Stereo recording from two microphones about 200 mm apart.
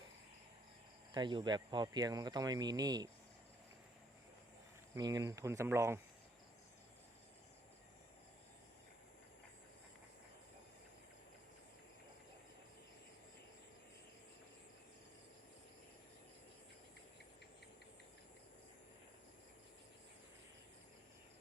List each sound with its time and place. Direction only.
1.1 s speech: 25° right (ahead or behind)
4.9 s speech: 20° right (ahead or behind)